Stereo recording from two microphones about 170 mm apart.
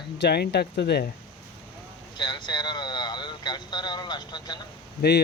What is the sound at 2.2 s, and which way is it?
Speech, 25° left (ahead or behind).